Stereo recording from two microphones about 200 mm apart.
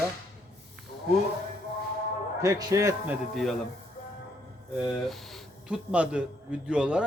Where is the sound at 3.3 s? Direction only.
Centre (ahead or behind).